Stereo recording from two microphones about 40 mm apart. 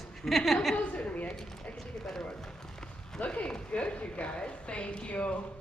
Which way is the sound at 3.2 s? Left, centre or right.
Left.